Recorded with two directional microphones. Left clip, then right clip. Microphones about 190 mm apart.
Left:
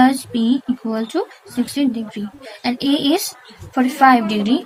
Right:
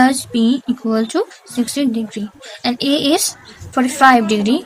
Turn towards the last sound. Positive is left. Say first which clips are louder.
# right 3 dB
turn(degrees=-35)  # may be behind; listen again after turning